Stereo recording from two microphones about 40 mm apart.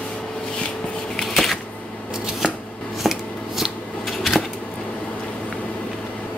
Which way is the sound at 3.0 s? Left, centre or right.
Centre.